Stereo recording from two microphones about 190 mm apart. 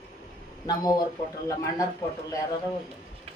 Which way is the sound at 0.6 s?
20° left (ahead or behind).